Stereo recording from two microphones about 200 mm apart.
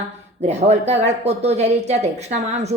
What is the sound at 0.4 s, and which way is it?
A woman's voice, 35° right (ahead or behind).